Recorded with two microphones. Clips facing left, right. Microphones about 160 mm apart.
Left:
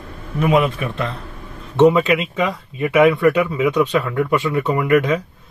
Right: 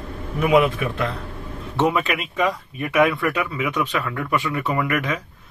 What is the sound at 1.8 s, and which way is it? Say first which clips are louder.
Speech: left 8 dB; 20° left (ahead or behind).